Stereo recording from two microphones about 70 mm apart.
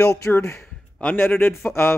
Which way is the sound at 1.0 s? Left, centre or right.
Left.